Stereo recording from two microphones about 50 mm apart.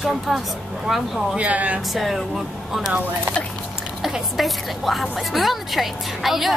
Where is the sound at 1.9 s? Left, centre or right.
Centre.